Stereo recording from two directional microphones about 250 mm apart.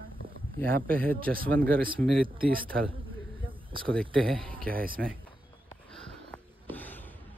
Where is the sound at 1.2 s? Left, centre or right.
Right.